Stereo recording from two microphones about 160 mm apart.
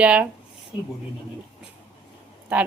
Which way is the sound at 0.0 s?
10° right (ahead or behind).